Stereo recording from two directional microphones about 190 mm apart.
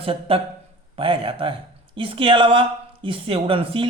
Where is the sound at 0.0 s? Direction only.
30° right (ahead or behind).